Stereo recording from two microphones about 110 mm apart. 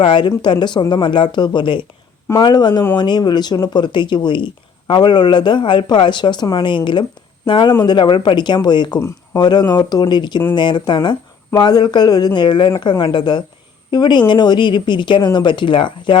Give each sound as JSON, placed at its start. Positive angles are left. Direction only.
{"t": 0.0, "sound": "speech", "side_deg": 45}